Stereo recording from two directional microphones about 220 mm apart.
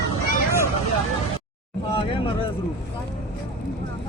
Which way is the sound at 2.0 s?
25° left (ahead or behind).